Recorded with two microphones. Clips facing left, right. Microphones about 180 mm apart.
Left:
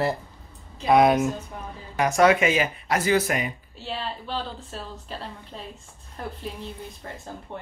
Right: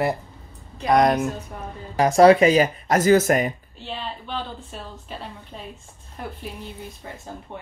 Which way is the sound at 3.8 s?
Centre (ahead or behind).